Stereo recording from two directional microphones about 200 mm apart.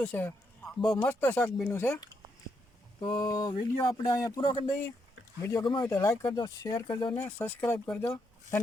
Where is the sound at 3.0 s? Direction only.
20° left (ahead or behind).